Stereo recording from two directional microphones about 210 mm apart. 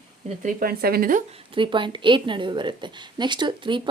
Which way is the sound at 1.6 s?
20° right (ahead or behind).